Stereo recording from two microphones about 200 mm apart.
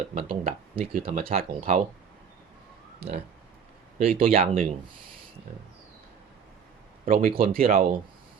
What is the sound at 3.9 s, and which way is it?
Speech, 30° right (ahead or behind).